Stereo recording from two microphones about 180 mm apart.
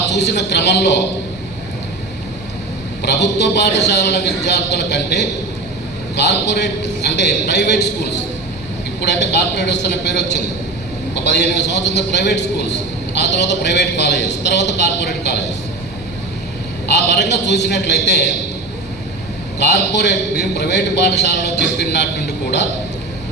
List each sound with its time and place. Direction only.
0.1 s a man's voice: 70° left (ahead or behind)
3.0 s a man's voice: 70° left (ahead or behind)
17.1 s a man's voice: 70° left (ahead or behind)
19.5 s a man's voice: 70° left (ahead or behind)